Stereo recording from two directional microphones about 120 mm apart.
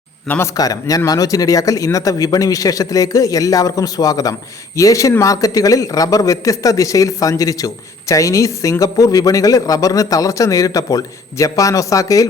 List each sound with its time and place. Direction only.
0.3 s speech: 20° left (ahead or behind)